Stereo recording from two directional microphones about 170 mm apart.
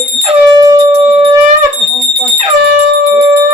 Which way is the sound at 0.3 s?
20° right (ahead or behind).